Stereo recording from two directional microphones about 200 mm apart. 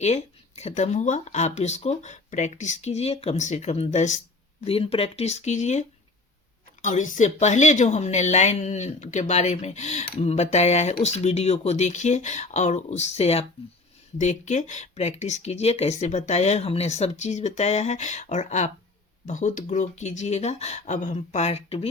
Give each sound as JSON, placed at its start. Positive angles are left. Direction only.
{"t": 0.0, "sound": "speech", "side_deg": 30}
{"t": 6.8, "sound": "speech", "side_deg": 40}